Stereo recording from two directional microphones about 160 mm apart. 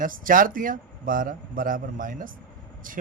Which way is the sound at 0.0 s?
60° right (ahead or behind).